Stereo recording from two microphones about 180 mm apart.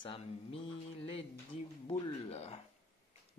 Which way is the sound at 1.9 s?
30° left (ahead or behind).